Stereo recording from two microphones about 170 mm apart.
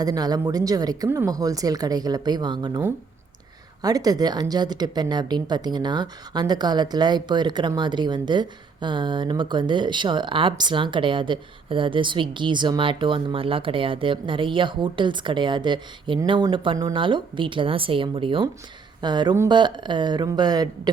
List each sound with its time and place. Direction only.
0.0 s speech: 20° right (ahead or behind)